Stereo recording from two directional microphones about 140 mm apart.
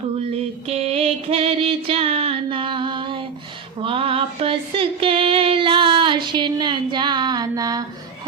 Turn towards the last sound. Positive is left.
turn(degrees=-25)  # may be behind; listen again after turning